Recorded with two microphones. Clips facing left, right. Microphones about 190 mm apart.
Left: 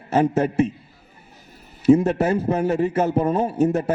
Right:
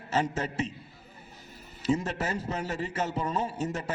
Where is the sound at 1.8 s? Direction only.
55° left (ahead or behind).